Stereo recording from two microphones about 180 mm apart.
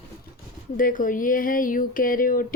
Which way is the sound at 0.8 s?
50° left (ahead or behind).